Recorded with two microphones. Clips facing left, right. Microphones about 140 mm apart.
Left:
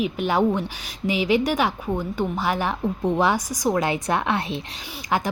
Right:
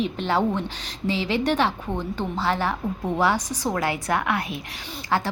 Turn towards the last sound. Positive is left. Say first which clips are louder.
# even
turn(degrees=15)  # may be behind; listen again after turning